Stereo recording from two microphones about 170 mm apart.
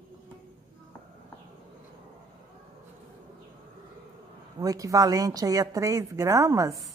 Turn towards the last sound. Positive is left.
turn(degrees=-20)  # may be behind; listen again after turning